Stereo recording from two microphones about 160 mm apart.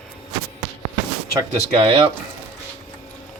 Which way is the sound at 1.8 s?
30° right (ahead or behind).